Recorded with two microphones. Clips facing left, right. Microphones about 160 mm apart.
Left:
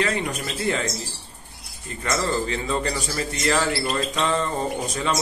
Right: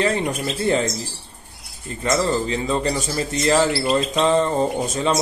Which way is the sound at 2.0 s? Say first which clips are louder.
Right 4 dB; 25° right (ahead or behind).